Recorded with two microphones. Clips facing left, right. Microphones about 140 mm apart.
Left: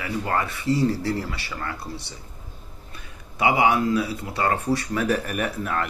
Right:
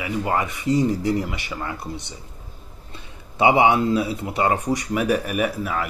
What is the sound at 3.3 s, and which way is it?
Speech, 25° right (ahead or behind).